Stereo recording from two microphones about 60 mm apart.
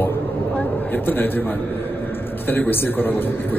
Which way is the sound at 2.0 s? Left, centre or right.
Left.